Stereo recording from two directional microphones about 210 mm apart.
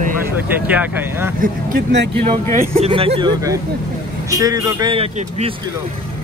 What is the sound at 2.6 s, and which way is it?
A man's voice, 30° right (ahead or behind).